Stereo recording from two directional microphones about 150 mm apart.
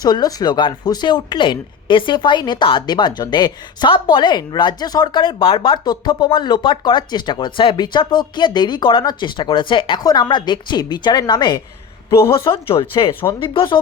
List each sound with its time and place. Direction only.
0.0 s speech: 25° left (ahead or behind)
12.7 s speech: 35° left (ahead or behind)